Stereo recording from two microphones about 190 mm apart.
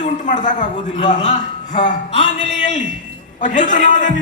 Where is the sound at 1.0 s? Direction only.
40° left (ahead or behind).